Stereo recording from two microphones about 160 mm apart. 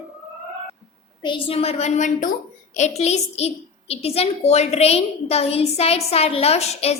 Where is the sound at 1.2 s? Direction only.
30° left (ahead or behind).